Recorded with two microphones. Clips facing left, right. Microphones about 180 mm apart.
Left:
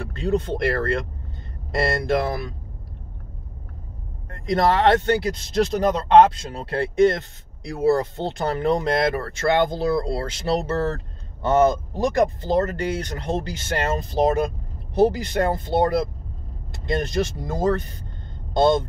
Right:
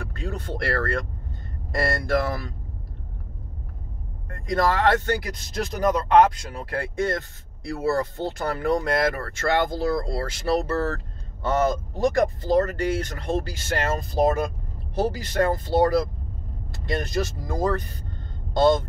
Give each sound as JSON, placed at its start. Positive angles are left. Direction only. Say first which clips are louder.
{"t": 0.2, "sound": "speech", "louder": "left 9 dB", "side_deg": 20}
{"t": 4.3, "sound": "speech", "louder": "left 3 dB", "side_deg": 25}
{"t": 16.7, "sound": "speech", "louder": "left 3 dB", "side_deg": 20}